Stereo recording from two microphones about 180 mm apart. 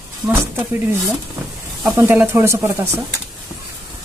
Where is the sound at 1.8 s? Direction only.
10° right (ahead or behind).